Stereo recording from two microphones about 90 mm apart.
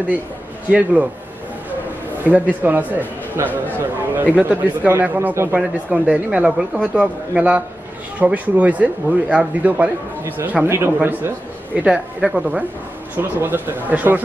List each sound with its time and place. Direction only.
0.7 s speech: 15° right (ahead or behind)
2.2 s a man's voice: 20° right (ahead or behind)
5.6 s speech: 10° right (ahead or behind)
11.8 s speech: 5° right (ahead or behind)
13.1 s a man's voice: 20° right (ahead or behind)